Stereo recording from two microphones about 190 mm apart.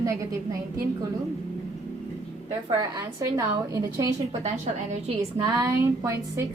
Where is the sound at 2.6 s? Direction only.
15° right (ahead or behind).